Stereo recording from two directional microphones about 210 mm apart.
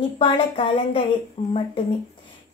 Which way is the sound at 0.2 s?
25° left (ahead or behind).